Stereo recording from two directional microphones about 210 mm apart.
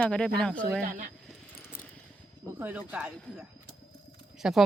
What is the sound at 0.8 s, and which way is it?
Speech, 40° right (ahead or behind).